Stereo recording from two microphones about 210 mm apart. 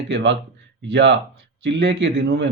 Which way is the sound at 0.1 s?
60° right (ahead or behind).